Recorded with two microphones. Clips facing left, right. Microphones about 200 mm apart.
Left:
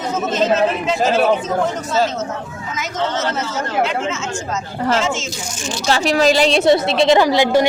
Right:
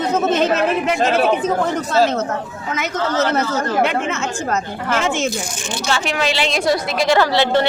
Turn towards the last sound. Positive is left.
turn(degrees=15)  # may be behind; listen again after turning